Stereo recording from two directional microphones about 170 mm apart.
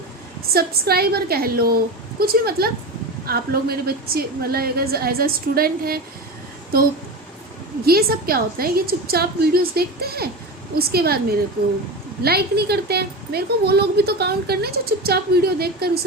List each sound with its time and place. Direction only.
0.5 s a woman's voice: 65° right (ahead or behind)
7.9 s a woman's voice: 65° right (ahead or behind)